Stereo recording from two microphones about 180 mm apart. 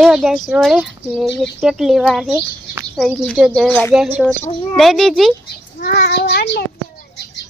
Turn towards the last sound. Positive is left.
turn(degrees=65)  # may be behind; listen again after turning